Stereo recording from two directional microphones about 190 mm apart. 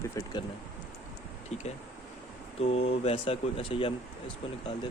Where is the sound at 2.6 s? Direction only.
30° left (ahead or behind).